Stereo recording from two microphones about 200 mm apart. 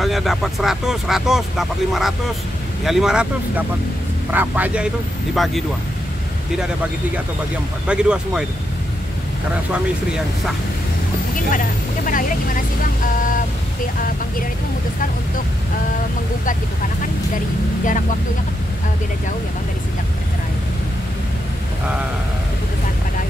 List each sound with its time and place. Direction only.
0.0 s a man's voice: centre (ahead or behind)
7.9 s speech: 5° right (ahead or behind)
9.7 s speech: 5° right (ahead or behind)
11.5 s speech: 40° left (ahead or behind)